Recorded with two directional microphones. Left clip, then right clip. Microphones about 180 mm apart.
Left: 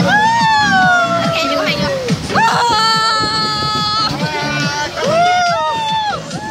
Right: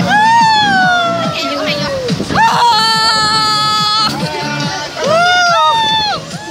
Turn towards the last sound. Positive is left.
turn(degrees=-10)  # may be behind; listen again after turning